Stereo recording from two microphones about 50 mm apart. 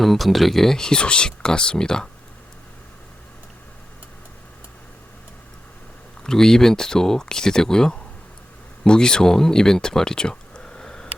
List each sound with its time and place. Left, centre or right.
0.0 s speech: centre
6.2 s speech: centre